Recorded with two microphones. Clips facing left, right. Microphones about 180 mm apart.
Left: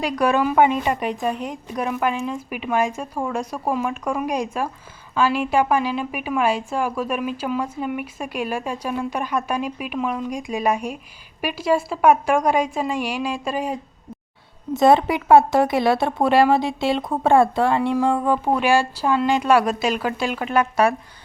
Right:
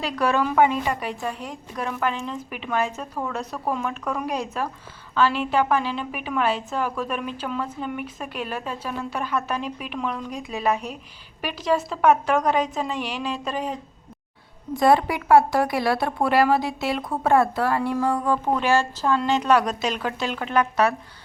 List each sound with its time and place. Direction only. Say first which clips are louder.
0.0 s a woman's voice: left 3 dB; 15° left (ahead or behind)
14.7 s a woman's voice: left 3 dB; 25° left (ahead or behind)